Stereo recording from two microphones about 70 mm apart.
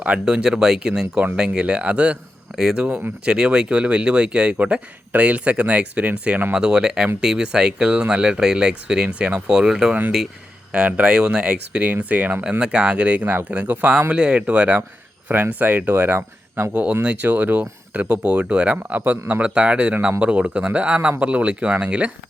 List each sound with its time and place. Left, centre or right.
0.0 s speech: centre
10.7 s speech: centre; by 16.7 s right
16.7 s speech: right